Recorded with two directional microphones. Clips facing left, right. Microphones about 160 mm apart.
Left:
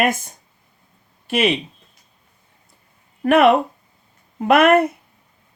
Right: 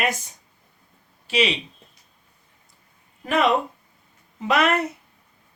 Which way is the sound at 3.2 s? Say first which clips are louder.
Left 7 dB; 60° left (ahead or behind).